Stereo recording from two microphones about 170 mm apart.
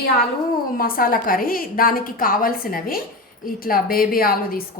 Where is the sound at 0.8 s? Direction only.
60° left (ahead or behind).